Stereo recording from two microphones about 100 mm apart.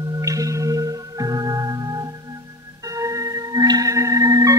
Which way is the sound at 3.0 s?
35° right (ahead or behind).